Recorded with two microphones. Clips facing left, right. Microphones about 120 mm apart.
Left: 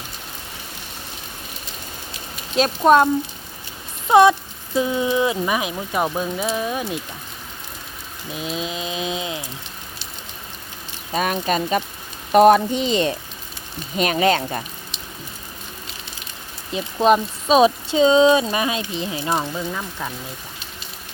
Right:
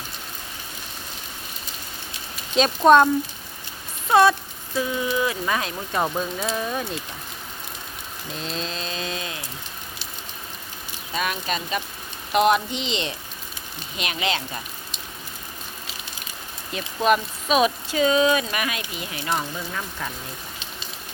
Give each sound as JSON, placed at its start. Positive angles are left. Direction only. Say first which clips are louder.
{"t": 2.6, "sound": "speech", "louder": "even", "side_deg": 5}
{"t": 4.1, "sound": "speech", "louder": "left 4 dB", "side_deg": 20}
{"t": 8.3, "sound": "speech", "louder": "left 4 dB", "side_deg": 10}
{"t": 11.1, "sound": "speech", "louder": "left 6 dB", "side_deg": 40}
{"t": 16.7, "sound": "speech", "louder": "left 4 dB", "side_deg": 30}